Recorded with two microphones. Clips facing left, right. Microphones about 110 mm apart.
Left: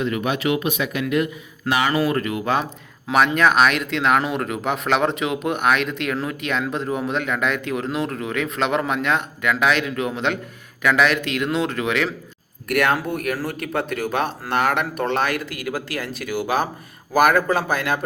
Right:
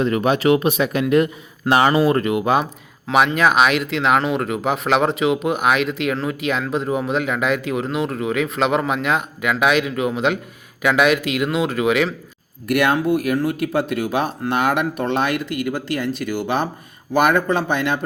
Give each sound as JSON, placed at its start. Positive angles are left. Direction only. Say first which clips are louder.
{"t": 0.0, "sound": "speech", "louder": "right 5 dB", "side_deg": -35}
{"t": 3.3, "sound": "speech", "louder": "right 1 dB", "side_deg": -5}